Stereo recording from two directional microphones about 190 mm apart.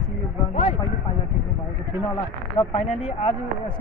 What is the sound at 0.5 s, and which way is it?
Speech, 30° left (ahead or behind).